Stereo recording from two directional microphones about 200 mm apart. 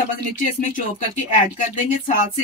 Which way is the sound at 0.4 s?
35° left (ahead or behind).